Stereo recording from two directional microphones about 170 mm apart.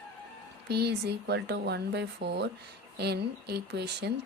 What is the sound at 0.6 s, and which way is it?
A woman's voice, 75° right (ahead or behind).